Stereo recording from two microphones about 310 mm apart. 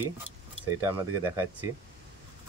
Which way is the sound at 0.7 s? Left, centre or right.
Centre.